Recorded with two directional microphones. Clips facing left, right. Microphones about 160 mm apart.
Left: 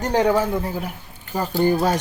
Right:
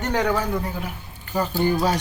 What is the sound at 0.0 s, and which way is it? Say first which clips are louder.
Speech: left 4 dB; 30° left (ahead or behind).